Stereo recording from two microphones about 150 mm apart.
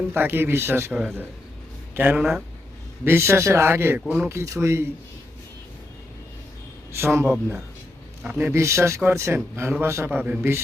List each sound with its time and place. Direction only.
0.1 s a man's voice: 15° right (ahead or behind)
4.3 s speech: 20° right (ahead or behind)
7.0 s a man's voice: 15° right (ahead or behind)
8.4 s a man's voice: 20° right (ahead or behind)